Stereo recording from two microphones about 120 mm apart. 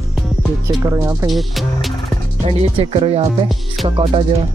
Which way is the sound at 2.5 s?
55° right (ahead or behind).